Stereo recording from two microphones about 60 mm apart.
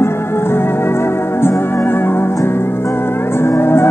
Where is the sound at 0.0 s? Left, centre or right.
Left.